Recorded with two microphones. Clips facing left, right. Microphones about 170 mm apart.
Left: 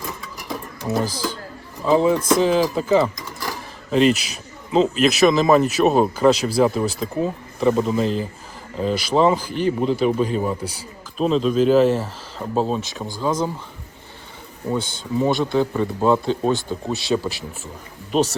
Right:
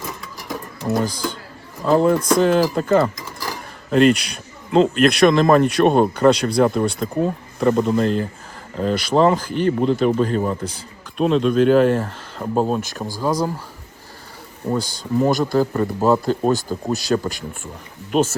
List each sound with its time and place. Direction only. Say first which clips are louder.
0.9 s a man's voice: right 2 dB; 5° left (ahead or behind)
15.2 s a man's voice: right 1 dB; centre (ahead or behind)